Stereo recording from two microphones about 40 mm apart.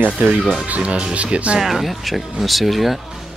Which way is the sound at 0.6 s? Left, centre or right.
Right.